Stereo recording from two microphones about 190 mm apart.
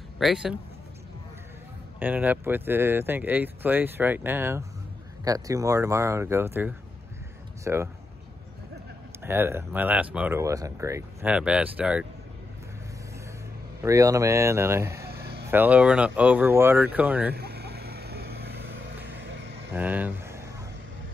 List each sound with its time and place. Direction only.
0.2 s speech: centre (ahead or behind)
2.0 s speech: 10° right (ahead or behind)
9.2 s speech: 10° right (ahead or behind)
13.8 s speech: 15° right (ahead or behind)
15.2 s vehicle: 55° right (ahead or behind)
15.5 s speech: 10° right (ahead or behind)
17.3 s vehicle: 55° right (ahead or behind)
19.7 s speech: 10° right (ahead or behind)